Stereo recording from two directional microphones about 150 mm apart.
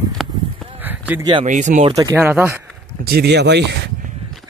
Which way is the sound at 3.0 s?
90° right.